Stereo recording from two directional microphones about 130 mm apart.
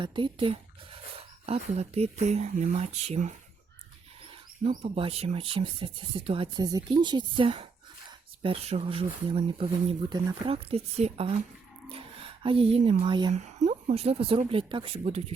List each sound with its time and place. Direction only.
0.0 s speech: 40° right (ahead or behind)
1.1 s speech: 55° right (ahead or behind)
4.9 s speech: 45° right (ahead or behind)
6.7 s speech: 30° right (ahead or behind); by 9.6 s 50° right (ahead or behind)
10.1 s speech: 40° right (ahead or behind)
11.9 s a sound: 45° right (ahead or behind)
13.0 s speech: 40° right (ahead or behind)
13.3 s speech: 65° right (ahead or behind); by 15.2 s 50° right (ahead or behind)